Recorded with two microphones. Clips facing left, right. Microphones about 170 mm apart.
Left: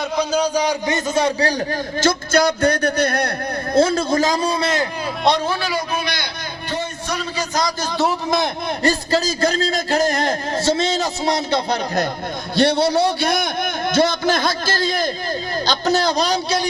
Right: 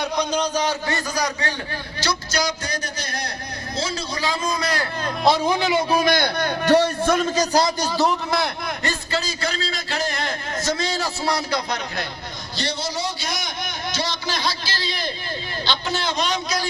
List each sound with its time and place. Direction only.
0.2 s a man's voice: 10° left (ahead or behind); by 1.5 s 30° left (ahead or behind)
2.0 s a man's voice: 50° left (ahead or behind); by 4.9 s 25° left (ahead or behind)
5.5 s a man's voice: 20° right (ahead or behind)
5.9 s a man's voice: 45° right (ahead or behind)
6.7 s a man's voice: 75° right (ahead or behind)
7.1 s a man's voice: 50° right (ahead or behind)
8.8 s a man's voice: 40° left (ahead or behind)
10.6 s a man's voice: 25° left (ahead or behind)
12.5 s a man's voice: 60° left (ahead or behind); by 16.6 s 35° left (ahead or behind)